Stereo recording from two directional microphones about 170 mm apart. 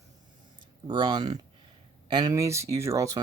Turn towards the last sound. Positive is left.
turn(degrees=-20)  # may be behind; listen again after turning